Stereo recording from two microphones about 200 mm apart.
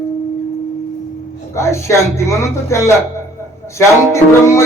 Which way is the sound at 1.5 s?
15° left (ahead or behind).